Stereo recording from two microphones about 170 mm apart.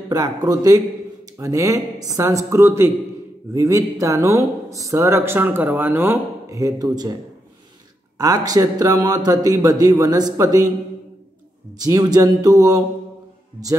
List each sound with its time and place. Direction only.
0.1 s speech: 20° right (ahead or behind)
8.2 s speech: 20° right (ahead or behind)
11.8 s speech: 20° right (ahead or behind)